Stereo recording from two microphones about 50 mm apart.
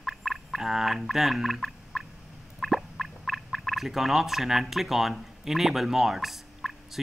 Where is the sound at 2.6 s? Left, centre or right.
Centre.